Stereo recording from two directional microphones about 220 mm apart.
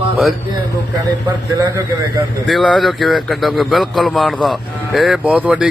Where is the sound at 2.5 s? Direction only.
Centre (ahead or behind).